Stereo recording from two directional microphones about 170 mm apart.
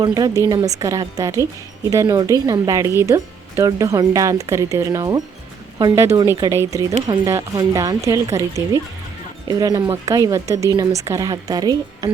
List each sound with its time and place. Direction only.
0.0 s speech: 20° right (ahead or behind)